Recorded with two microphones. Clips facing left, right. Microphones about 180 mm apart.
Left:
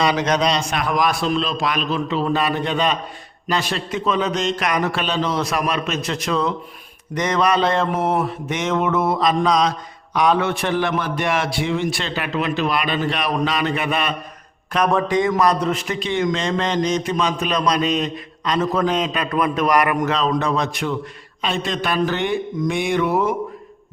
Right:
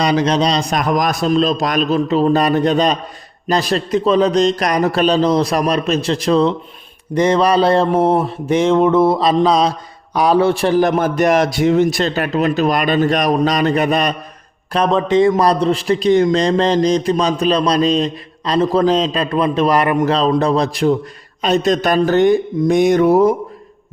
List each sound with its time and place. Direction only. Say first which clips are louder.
0.0 s a man's voice: right 4 dB; 35° right (ahead or behind)
14.8 s a man's voice: right 6 dB; 20° right (ahead or behind); by 23.3 s 40° right (ahead or behind)